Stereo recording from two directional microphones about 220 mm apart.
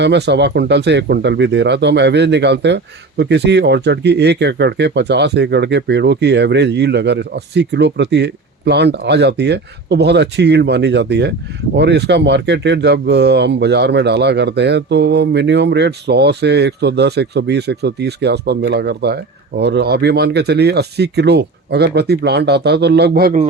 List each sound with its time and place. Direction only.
0.0 s speech: 50° right (ahead or behind)